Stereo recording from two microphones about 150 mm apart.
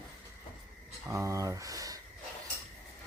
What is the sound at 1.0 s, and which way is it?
Speech, 20° right (ahead or behind).